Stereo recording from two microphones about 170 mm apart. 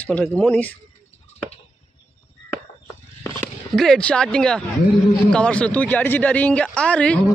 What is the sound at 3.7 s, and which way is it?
Speech, 5° left (ahead or behind).